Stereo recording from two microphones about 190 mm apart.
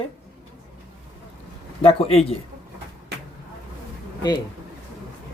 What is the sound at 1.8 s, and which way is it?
Speech, 30° left (ahead or behind).